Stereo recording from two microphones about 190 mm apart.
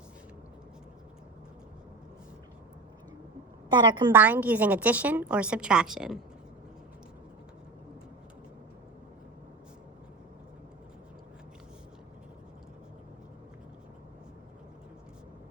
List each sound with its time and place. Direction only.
3.7 s a woman's voice: 25° right (ahead or behind)
4.1 s a woman's voice: 10° right (ahead or behind)